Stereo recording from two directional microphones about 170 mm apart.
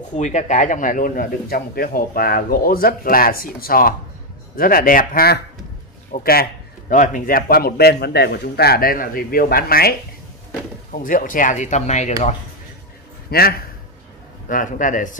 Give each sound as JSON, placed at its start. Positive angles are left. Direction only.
{"t": 0.1, "sound": "a man's voice", "side_deg": 45}
{"t": 13.3, "sound": "a man's voice", "side_deg": 65}
{"t": 14.5, "sound": "speech", "side_deg": 50}